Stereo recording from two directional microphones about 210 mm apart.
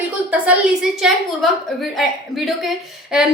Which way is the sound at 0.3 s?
5° right (ahead or behind).